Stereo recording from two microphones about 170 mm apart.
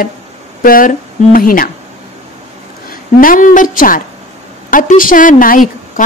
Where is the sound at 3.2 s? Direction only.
55° left (ahead or behind).